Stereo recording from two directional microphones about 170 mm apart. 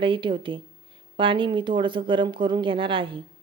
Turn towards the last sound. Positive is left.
turn(degrees=-30)  # may be behind; listen again after turning